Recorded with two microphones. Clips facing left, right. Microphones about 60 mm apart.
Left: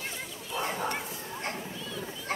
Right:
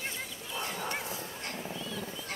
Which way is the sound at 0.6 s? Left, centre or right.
Left.